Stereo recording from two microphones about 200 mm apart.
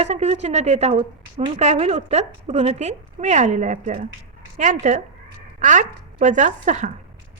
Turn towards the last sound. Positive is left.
turn(degrees=-40)  # may be behind; listen again after turning